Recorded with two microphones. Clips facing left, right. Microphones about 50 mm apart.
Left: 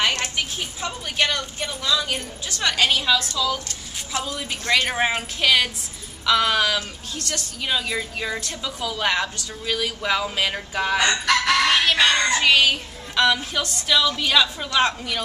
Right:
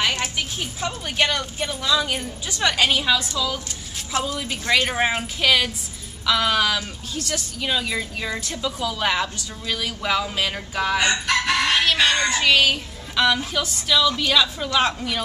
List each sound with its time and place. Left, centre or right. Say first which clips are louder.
0.1 s speech: even; centre